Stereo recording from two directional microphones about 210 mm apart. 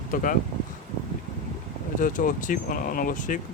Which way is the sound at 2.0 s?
40° left (ahead or behind).